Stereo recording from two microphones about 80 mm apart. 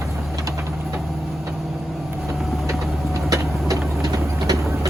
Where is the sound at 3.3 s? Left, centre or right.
Right.